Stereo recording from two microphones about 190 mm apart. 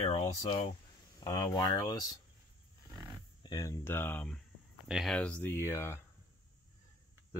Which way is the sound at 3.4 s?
20° left (ahead or behind).